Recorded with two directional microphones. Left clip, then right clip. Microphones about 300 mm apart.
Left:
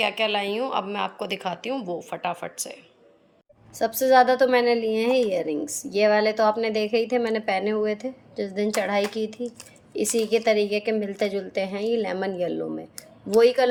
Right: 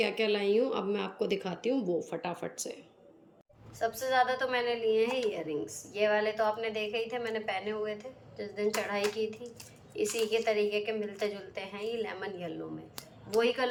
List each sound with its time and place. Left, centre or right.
0.0 s a woman's voice: centre
3.8 s a woman's voice: centre